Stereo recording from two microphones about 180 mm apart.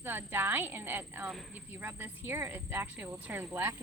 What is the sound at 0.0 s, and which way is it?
Speech, 10° right (ahead or behind).